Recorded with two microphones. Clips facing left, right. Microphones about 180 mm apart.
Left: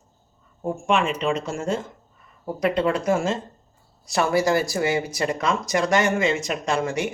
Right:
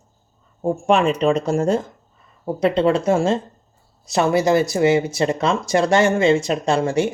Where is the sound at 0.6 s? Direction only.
35° right (ahead or behind).